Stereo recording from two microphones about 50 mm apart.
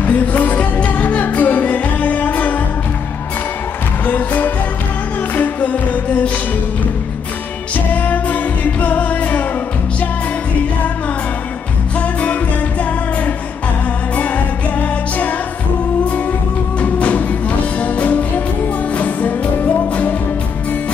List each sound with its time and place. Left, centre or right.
0.0 s music: left
4.0 s music: left
7.7 s music: left
14.8 s music: left
16.8 s music: left